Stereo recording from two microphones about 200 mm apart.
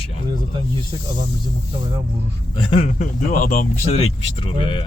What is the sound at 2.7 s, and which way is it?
Speech, 35° left (ahead or behind).